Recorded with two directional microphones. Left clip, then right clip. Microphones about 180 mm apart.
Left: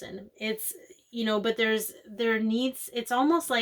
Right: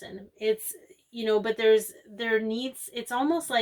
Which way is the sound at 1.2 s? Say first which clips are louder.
Right 4 dB; 35° left (ahead or behind).